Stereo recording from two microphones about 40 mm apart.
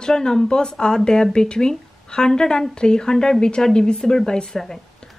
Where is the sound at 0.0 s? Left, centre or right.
Centre.